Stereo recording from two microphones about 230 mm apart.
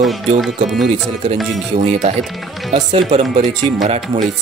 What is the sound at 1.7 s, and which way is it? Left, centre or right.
Speech, right.